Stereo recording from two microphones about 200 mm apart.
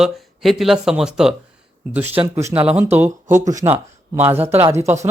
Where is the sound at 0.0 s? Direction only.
Centre (ahead or behind).